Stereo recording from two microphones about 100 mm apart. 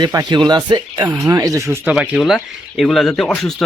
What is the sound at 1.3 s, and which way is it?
Speech, 35° right (ahead or behind).